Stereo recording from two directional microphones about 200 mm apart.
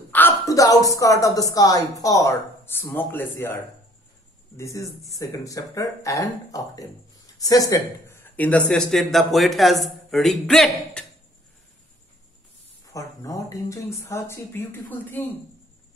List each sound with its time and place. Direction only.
0.1 s a woman's voice: 15° left (ahead or behind)
4.6 s speech: 15° left (ahead or behind)
12.8 s speech: 15° left (ahead or behind)